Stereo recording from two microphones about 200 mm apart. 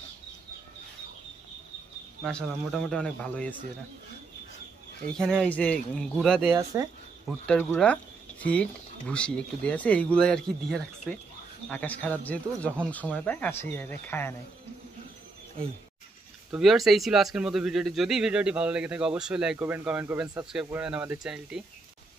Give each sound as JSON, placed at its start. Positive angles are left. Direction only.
{"t": 2.9, "sound": "speech", "side_deg": 5}
{"t": 5.1, "sound": "speech", "side_deg": 5}
{"t": 6.5, "sound": "speech", "side_deg": -15}
{"t": 7.2, "sound": "speech", "side_deg": 5}
{"t": 16.5, "sound": "speech", "side_deg": 0}